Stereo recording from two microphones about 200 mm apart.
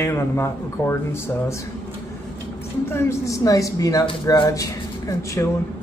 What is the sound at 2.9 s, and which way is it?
Speech, 15° left (ahead or behind).